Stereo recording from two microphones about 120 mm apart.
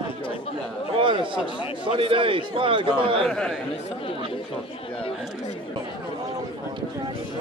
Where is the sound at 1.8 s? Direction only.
45° right (ahead or behind).